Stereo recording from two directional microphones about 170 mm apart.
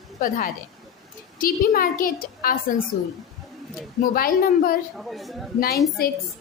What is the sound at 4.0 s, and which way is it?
Speech, 60° left (ahead or behind).